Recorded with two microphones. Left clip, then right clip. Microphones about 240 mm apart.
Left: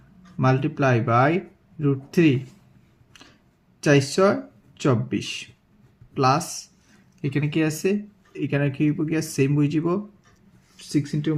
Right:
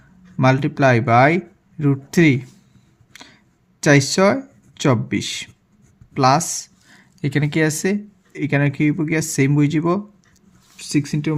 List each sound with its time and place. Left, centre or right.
0.3 s speech: right
3.8 s speech: right